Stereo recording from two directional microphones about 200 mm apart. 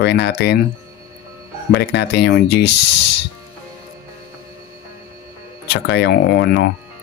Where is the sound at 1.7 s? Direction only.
60° left (ahead or behind).